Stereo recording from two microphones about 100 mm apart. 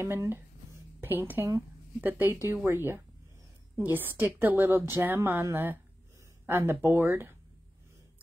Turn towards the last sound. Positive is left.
turn(degrees=-20)  # may be behind; listen again after turning